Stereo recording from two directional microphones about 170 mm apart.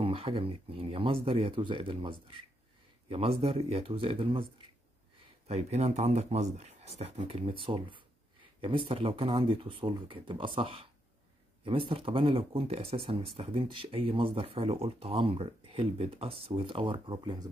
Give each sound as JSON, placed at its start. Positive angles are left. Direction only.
{"t": 0.0, "sound": "speech", "side_deg": -35}